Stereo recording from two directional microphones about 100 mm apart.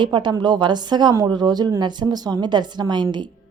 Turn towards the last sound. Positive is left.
turn(degrees=-50)  # may be behind; listen again after turning